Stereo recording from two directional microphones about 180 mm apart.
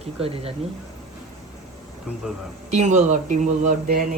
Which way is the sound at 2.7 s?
40° right (ahead or behind).